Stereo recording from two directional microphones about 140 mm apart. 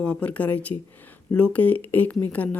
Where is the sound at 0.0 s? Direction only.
10° left (ahead or behind).